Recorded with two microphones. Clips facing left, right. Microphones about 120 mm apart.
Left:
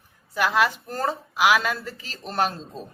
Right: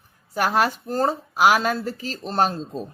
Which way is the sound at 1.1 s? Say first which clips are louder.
Right 1 dB; 45° right (ahead or behind).